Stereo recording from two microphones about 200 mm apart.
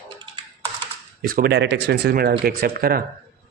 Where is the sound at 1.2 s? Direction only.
50° right (ahead or behind).